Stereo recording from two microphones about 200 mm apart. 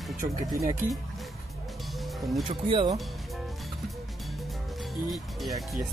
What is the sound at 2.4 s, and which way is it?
Speech, 25° right (ahead or behind).